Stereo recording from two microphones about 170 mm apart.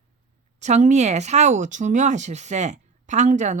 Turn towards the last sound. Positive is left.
turn(degrees=-45)  # may be behind; listen again after turning